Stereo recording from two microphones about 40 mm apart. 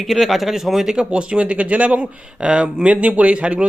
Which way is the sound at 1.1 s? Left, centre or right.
Right.